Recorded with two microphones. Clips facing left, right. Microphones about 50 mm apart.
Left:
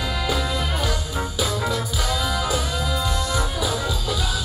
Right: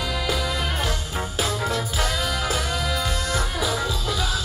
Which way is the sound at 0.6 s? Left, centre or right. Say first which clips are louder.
Left 1 dB; right.